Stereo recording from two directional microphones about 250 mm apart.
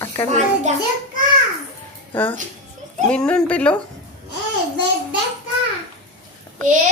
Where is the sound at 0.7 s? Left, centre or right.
Right.